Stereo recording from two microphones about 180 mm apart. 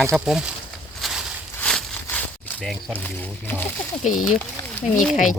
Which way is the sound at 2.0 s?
10° left (ahead or behind).